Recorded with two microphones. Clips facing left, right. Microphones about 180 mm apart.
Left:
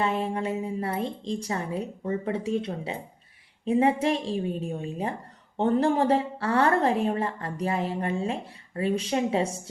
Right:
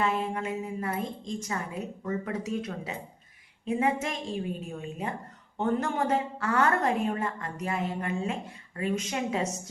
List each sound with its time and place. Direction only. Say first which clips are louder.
0.0 s a woman's voice: left 2 dB; 30° left (ahead or behind)